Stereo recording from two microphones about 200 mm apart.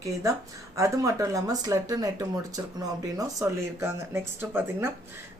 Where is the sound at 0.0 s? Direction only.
15° right (ahead or behind).